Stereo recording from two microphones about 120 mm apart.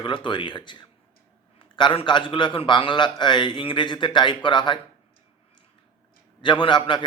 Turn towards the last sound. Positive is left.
turn(degrees=40)  # may be behind; listen again after turning